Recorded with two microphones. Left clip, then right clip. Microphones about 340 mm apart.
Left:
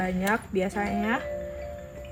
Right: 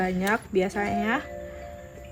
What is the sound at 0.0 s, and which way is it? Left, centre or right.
Speech, centre.